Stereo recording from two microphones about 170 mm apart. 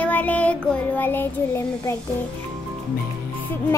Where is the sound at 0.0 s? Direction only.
10° left (ahead or behind).